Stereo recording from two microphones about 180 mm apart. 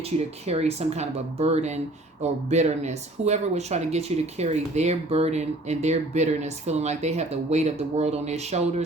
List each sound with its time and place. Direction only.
0.0 s speech: 35° right (ahead or behind)